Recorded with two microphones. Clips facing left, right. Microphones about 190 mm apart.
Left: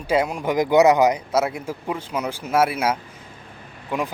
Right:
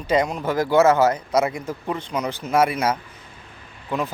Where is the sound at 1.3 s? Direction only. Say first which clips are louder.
Right 1 dB; 5° left (ahead or behind).